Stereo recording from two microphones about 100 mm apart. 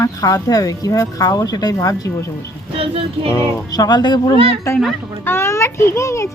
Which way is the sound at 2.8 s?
70° right (ahead or behind).